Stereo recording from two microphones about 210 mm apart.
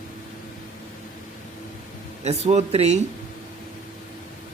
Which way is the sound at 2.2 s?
30° right (ahead or behind).